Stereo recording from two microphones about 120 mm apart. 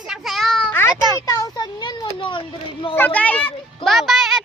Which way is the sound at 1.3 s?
30° left (ahead or behind).